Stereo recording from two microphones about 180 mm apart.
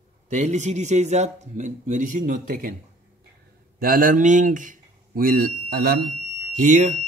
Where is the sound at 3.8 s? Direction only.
50° right (ahead or behind).